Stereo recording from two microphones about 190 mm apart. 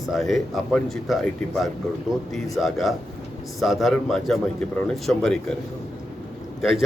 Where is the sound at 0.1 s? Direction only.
Centre (ahead or behind).